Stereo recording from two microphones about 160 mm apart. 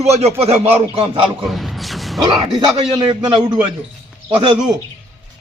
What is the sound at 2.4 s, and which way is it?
A man's voice, 25° right (ahead or behind).